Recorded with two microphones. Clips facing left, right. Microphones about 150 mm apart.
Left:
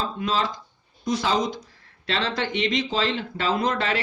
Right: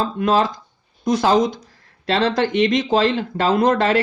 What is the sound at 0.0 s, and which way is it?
Speech, 50° right (ahead or behind).